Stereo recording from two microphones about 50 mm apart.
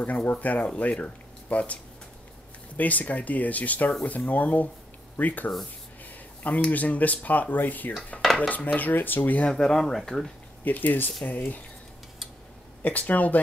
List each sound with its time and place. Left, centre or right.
0.0 s speech: left
2.8 s speech: left
9.5 s speech: centre
10.6 s speech: left
12.8 s speech: left